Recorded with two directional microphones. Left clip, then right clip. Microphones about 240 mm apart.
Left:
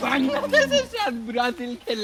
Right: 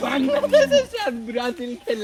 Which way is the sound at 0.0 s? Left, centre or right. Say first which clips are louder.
Right 2 dB; centre.